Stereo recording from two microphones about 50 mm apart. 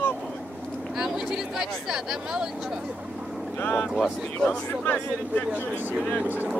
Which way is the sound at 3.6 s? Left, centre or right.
Left.